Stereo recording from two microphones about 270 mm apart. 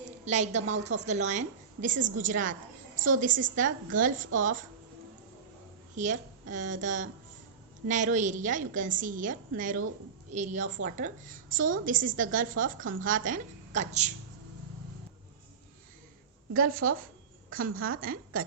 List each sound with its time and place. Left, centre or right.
0.3 s a woman's voice: right
6.0 s a woman's voice: right
16.6 s a woman's voice: right